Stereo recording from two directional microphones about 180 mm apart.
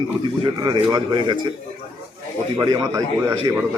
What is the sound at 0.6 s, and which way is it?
Speech, 25° right (ahead or behind).